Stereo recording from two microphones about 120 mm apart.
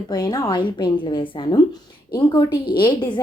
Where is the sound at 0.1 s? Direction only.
35° left (ahead or behind).